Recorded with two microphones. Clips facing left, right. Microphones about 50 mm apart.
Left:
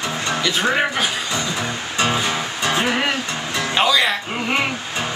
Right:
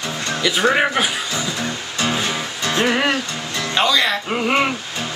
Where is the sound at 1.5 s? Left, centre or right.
Centre.